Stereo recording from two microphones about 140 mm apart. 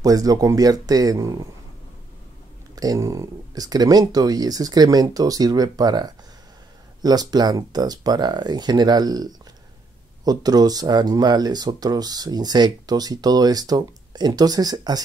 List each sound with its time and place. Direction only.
0.0 s speech: 25° right (ahead or behind)
2.7 s speech: 25° right (ahead or behind)